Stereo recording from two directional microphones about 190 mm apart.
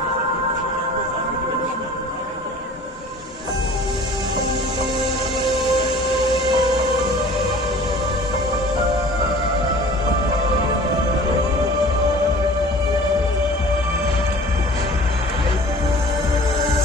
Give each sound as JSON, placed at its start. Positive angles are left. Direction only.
{"t": 5.4, "sound": "music", "side_deg": 0}
{"t": 6.0, "sound": "music", "side_deg": 25}